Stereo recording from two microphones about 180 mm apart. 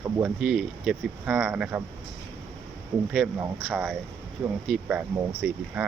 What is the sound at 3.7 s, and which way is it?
Speech, 5° right (ahead or behind).